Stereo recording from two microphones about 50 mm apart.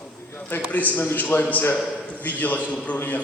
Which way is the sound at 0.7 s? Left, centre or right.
Left.